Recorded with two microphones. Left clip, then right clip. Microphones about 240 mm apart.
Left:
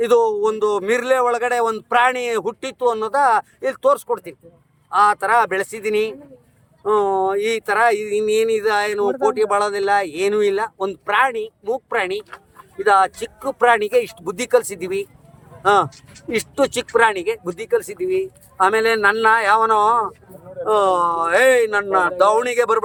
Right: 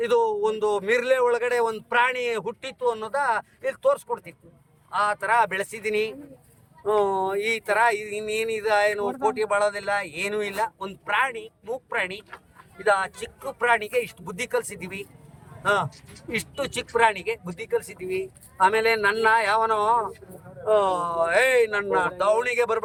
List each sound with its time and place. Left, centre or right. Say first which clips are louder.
0.0 s speech: left 6 dB; centre